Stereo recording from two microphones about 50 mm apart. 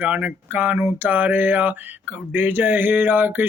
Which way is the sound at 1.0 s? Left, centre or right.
Right.